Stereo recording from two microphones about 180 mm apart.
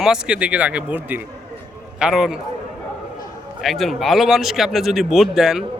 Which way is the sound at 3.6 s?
Centre (ahead or behind).